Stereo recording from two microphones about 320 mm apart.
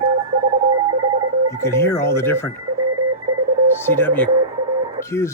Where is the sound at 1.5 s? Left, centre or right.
Centre.